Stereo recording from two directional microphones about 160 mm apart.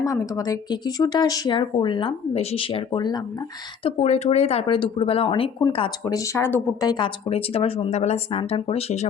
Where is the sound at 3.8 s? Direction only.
40° left (ahead or behind).